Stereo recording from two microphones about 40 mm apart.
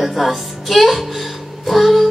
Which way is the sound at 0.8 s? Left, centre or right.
Centre.